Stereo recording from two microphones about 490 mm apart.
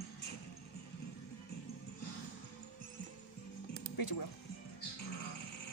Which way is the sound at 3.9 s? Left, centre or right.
Left.